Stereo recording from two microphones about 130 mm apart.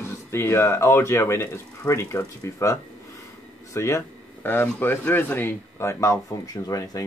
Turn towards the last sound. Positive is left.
turn(degrees=30)  # may be behind; listen again after turning